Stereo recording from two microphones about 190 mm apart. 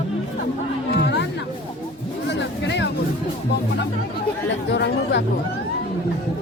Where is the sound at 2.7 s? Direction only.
70° left (ahead or behind).